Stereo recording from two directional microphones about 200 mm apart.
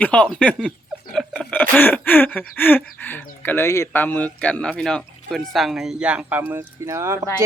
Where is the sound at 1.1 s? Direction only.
Centre (ahead or behind).